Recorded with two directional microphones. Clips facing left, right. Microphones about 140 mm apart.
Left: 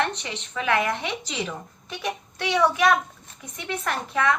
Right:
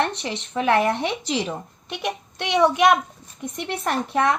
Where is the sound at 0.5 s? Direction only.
30° right (ahead or behind).